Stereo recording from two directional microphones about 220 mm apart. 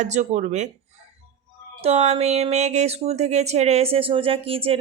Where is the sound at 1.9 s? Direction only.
30° right (ahead or behind).